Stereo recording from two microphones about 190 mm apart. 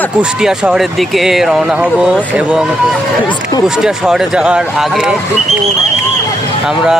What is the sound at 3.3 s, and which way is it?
Speech, 20° left (ahead or behind).